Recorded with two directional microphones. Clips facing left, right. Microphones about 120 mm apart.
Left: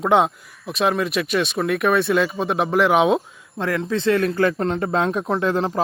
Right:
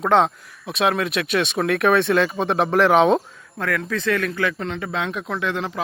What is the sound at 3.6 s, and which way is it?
Speech, 25° left (ahead or behind).